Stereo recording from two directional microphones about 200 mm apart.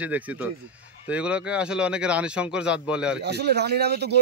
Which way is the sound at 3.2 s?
55° right (ahead or behind).